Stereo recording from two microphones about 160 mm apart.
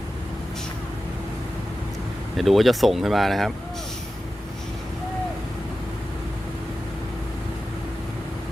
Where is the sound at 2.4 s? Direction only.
Centre (ahead or behind).